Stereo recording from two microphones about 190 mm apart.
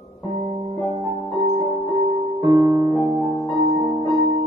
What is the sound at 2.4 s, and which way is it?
Music, 20° right (ahead or behind).